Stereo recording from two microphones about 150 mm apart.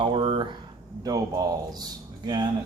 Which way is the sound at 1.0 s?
25° right (ahead or behind).